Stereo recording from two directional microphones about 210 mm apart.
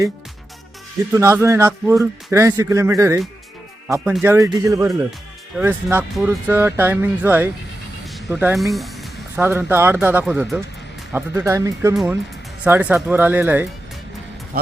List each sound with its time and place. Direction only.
1.1 s speech: 15° right (ahead or behind)
8.0 s music: 5° right (ahead or behind)
9.4 s speech: 10° right (ahead or behind)
14.5 s speech: 45° right (ahead or behind)